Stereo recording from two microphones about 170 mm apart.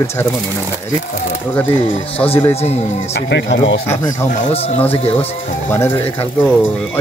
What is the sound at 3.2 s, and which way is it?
Speech, 90° left.